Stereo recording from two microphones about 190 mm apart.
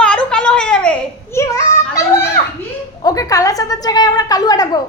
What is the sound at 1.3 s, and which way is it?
A child's voice, 15° left (ahead or behind).